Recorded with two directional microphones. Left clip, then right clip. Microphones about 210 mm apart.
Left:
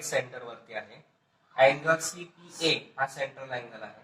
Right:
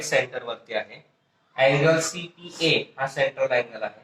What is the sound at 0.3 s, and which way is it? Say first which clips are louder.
Speech: right 10 dB; 40° right (ahead or behind).